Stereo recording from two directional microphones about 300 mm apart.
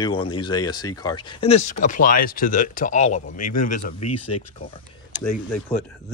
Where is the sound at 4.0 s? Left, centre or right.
Left.